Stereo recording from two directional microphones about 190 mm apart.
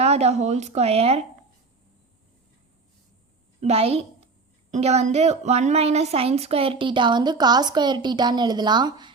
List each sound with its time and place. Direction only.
0.0 s a woman's voice: 35° right (ahead or behind)
3.6 s a woman's voice: 35° right (ahead or behind)